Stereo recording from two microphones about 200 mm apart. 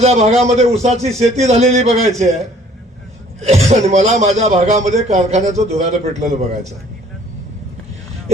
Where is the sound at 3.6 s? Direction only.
35° right (ahead or behind).